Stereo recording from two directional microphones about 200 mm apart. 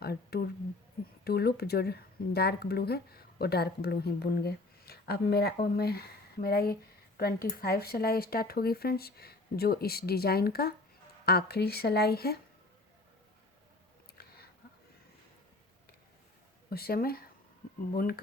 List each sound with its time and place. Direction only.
0.0 s a sound: 50° left (ahead or behind)
1.2 s speech: 50° left (ahead or behind)
16.6 s speech: 50° left (ahead or behind)